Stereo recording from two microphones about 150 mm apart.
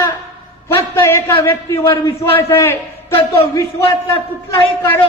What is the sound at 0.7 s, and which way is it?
A man's voice, 15° left (ahead or behind).